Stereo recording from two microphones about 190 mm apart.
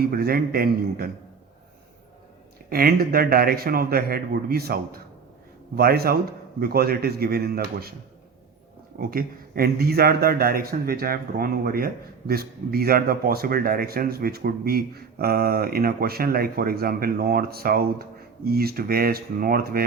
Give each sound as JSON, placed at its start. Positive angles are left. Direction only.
{"t": 0.0, "sound": "speech", "side_deg": -55}
{"t": 2.6, "sound": "speech", "side_deg": -50}
{"t": 9.0, "sound": "speech", "side_deg": -50}